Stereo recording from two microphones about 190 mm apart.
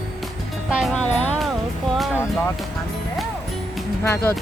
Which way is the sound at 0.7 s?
Centre (ahead or behind).